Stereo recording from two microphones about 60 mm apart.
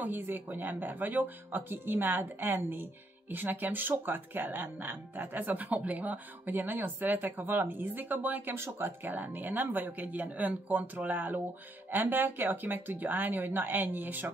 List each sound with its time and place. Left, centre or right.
0.0 s speech: right
8.5 s speech: right